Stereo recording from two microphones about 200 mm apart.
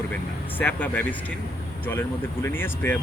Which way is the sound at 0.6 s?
10° left (ahead or behind).